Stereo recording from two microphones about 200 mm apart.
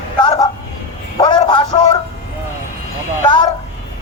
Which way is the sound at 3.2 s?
25° left (ahead or behind).